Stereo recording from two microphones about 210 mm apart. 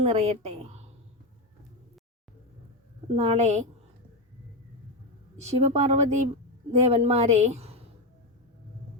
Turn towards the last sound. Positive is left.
turn(degrees=-30)  # may be behind; listen again after turning